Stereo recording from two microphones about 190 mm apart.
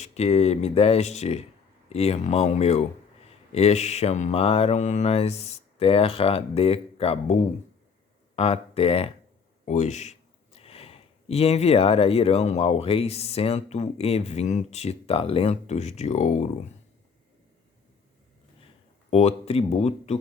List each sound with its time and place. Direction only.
0.0 s speech: 35° left (ahead or behind)
8.4 s speech: 30° left (ahead or behind)
19.1 s speech: 30° left (ahead or behind)